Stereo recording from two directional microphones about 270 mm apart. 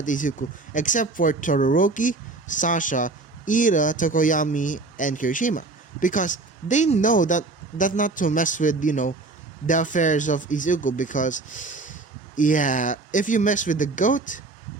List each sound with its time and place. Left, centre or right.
0.0 s speech: left